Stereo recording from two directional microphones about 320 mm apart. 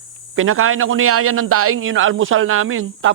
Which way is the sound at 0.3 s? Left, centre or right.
Right.